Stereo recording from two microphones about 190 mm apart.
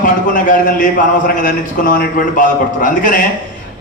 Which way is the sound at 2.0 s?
45° left (ahead or behind).